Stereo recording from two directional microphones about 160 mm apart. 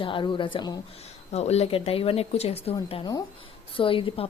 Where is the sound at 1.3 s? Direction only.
40° left (ahead or behind).